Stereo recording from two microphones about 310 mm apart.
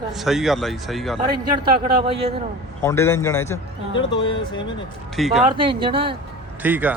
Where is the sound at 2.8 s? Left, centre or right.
Centre.